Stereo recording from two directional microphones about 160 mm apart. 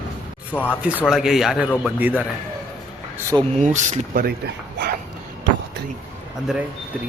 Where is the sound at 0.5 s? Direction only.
10° left (ahead or behind).